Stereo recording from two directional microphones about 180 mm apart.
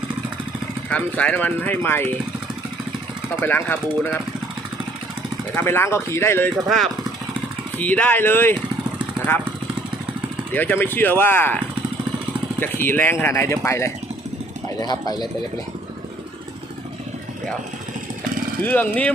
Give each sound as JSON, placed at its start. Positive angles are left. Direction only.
{"t": 0.9, "sound": "speech", "side_deg": 5}
{"t": 3.4, "sound": "speech", "side_deg": 10}
{"t": 5.5, "sound": "speech", "side_deg": 15}
{"t": 6.7, "sound": "speech", "side_deg": 0}
{"t": 10.5, "sound": "speech", "side_deg": 10}
{"t": 18.6, "sound": "speech", "side_deg": 10}